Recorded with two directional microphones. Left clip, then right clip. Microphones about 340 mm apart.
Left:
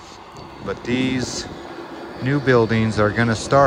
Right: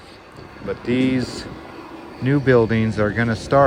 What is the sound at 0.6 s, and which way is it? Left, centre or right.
Speech, centre.